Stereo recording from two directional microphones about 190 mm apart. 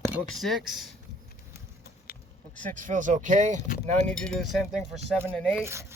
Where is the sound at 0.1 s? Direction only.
Centre (ahead or behind).